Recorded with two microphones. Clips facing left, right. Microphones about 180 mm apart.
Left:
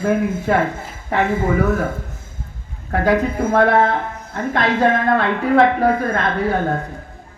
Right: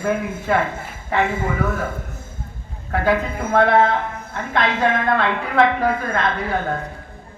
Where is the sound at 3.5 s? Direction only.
45° left (ahead or behind).